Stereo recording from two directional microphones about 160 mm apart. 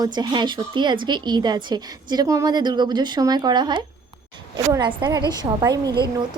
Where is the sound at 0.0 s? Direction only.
25° right (ahead or behind).